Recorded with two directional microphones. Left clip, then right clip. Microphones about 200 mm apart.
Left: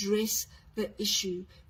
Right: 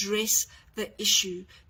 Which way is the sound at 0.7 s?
Centre (ahead or behind).